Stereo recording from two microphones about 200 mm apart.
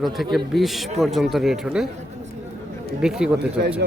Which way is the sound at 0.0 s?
Centre (ahead or behind).